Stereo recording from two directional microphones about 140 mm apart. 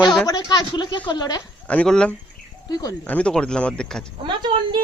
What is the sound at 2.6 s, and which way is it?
Speech, 30° left (ahead or behind).